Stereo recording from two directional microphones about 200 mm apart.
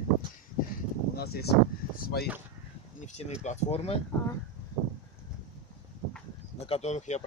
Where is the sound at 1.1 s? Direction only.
50° left (ahead or behind).